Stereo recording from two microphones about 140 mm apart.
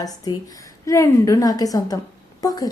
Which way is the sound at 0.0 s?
25° left (ahead or behind).